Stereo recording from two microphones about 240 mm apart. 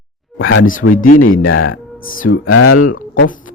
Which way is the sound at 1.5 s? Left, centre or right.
Left.